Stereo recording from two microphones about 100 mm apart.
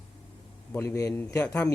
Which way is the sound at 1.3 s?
15° left (ahead or behind).